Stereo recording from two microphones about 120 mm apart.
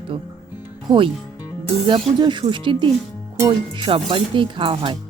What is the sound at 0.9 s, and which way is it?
Speech, 45° right (ahead or behind).